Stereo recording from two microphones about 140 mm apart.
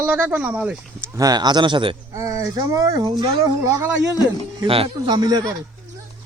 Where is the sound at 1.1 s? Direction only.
25° right (ahead or behind).